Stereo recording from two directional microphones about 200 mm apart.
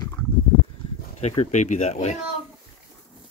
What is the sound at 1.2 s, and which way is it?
Speech, 35° left (ahead or behind).